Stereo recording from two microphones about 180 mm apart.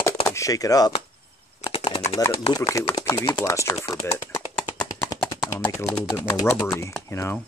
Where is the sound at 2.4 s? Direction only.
20° left (ahead or behind).